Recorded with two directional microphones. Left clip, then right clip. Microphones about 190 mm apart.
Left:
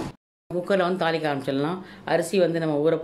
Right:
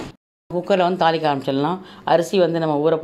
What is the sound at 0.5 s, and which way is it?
Speech, 15° right (ahead or behind).